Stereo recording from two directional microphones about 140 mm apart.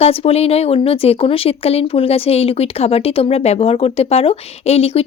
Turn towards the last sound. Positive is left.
turn(degrees=45)  # may be behind; listen again after turning